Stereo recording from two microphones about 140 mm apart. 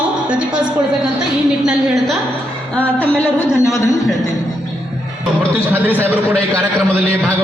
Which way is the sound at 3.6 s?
20° left (ahead or behind).